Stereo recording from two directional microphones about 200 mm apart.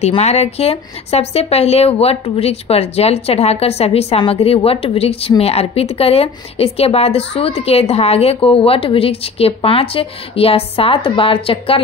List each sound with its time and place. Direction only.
0.0 s speech: 35° left (ahead or behind)